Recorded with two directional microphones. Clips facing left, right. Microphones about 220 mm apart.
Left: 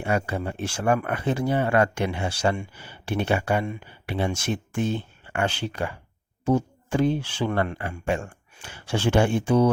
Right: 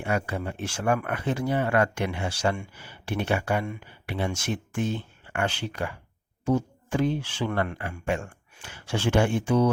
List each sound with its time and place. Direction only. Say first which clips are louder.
0.0 s speech: left 2 dB; 30° left (ahead or behind)